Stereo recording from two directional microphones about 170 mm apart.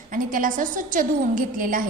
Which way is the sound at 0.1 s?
50° right (ahead or behind).